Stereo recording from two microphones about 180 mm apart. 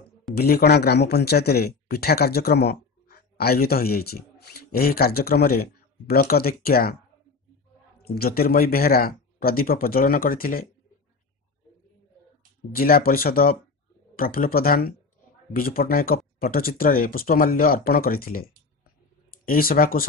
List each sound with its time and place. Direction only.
0.3 s speech: 60° left (ahead or behind)
8.0 s speech: 60° left (ahead or behind)
12.7 s speech: 55° left (ahead or behind)